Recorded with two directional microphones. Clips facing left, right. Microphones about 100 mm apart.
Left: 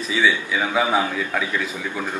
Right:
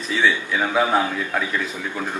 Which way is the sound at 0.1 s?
Centre (ahead or behind).